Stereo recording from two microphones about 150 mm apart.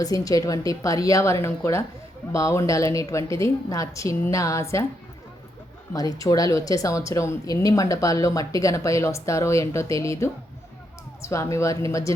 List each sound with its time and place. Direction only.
0.0 s speech: 25° left (ahead or behind)
5.9 s speech: 25° left (ahead or behind)